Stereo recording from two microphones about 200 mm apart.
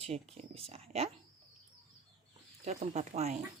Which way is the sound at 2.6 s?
35° right (ahead or behind).